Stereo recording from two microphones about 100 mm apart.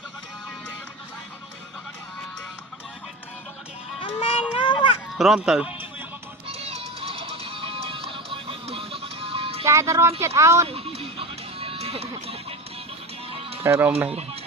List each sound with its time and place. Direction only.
4.0 s a sound: 65° left (ahead or behind)
5.1 s speech: 5° right (ahead or behind)
6.5 s music: 90° right; by 9.6 s 75° right (ahead or behind)
9.6 s music: 30° right (ahead or behind)
10.2 s speech: 30° right (ahead or behind)
10.7 s music: 75° right (ahead or behind)
13.7 s speech: 25° right (ahead or behind)